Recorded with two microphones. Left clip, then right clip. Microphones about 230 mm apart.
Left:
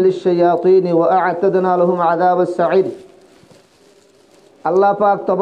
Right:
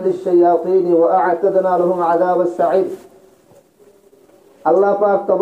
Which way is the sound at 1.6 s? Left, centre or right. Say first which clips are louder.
Left 1 dB; left.